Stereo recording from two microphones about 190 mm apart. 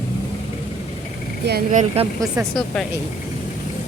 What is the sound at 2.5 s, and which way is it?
Speech, centre (ahead or behind).